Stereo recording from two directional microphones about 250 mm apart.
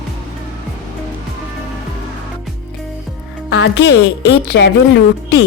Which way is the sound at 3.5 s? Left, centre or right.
Left.